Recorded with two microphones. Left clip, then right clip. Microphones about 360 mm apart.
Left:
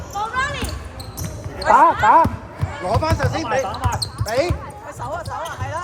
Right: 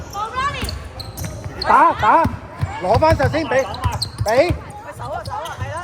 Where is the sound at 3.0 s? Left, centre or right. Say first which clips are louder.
Right 6 dB; centre.